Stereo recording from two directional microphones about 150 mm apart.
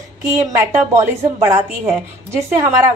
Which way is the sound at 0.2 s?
20° right (ahead or behind).